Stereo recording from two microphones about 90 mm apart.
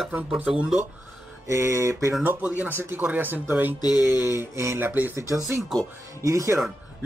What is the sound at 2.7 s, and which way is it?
Speech, 25° right (ahead or behind).